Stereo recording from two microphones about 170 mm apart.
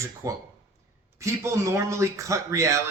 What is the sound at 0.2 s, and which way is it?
Speech, 20° right (ahead or behind).